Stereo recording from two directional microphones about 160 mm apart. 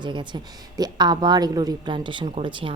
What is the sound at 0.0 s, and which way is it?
Speech, 30° right (ahead or behind).